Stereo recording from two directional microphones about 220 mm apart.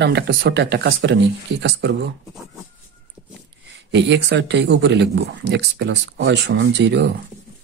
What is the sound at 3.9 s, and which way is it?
Speech, 55° right (ahead or behind).